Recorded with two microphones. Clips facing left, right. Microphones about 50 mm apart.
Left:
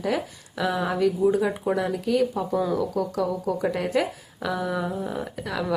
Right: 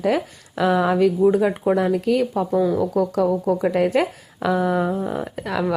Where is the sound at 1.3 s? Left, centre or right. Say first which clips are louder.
Right 5 dB; right.